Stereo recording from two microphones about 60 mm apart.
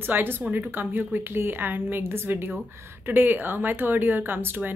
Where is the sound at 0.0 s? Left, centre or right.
Right.